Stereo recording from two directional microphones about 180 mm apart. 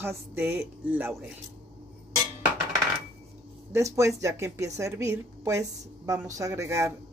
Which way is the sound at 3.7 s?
15° right (ahead or behind).